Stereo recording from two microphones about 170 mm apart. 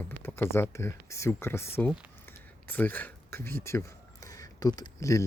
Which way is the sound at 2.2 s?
10° left (ahead or behind).